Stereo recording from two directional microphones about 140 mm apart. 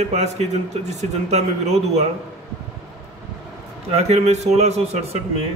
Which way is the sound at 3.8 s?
50° right (ahead or behind).